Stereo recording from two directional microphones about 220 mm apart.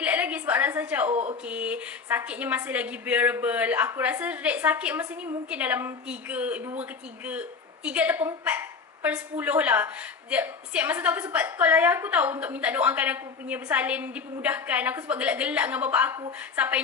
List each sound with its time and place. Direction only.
0.0 s a woman's voice: 5° right (ahead or behind)
1.1 s speech: 30° right (ahead or behind)
1.4 s speech: 5° right (ahead or behind)